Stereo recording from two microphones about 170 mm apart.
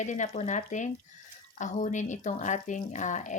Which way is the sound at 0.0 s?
45° left (ahead or behind).